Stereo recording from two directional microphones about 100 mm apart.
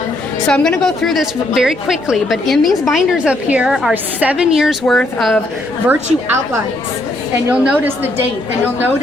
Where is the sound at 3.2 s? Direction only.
10° right (ahead or behind).